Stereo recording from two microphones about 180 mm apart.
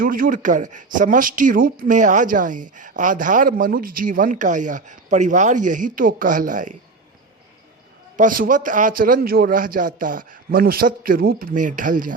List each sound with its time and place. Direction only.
0.0 s speech: 50° right (ahead or behind)
8.1 s speech: 50° right (ahead or behind)